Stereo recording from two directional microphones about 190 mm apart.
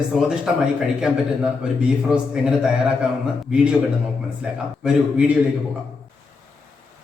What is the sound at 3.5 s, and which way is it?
Speech, 5° right (ahead or behind).